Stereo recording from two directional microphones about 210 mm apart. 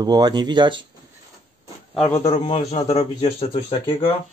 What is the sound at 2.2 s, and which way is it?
A man's voice, 25° left (ahead or behind).